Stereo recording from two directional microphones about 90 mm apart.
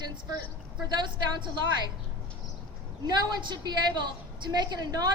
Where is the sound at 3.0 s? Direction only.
55° right (ahead or behind).